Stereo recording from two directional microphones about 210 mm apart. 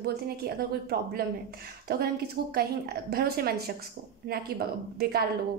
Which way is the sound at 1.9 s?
50° right (ahead or behind).